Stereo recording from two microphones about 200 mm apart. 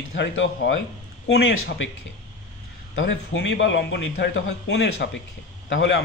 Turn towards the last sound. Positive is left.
turn(degrees=60)  # may be behind; listen again after turning